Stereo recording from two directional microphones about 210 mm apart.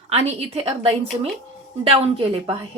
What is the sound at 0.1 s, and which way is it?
A woman's voice, 30° right (ahead or behind).